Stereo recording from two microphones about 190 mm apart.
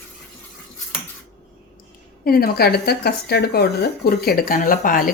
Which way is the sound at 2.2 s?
50° left (ahead or behind).